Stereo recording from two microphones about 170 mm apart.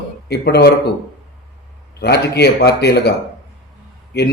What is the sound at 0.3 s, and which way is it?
Speech, 80° left.